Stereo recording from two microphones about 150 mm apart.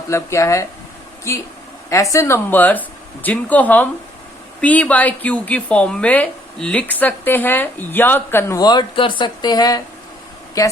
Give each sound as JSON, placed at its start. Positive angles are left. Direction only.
{"t": 0.1, "sound": "speech", "side_deg": 20}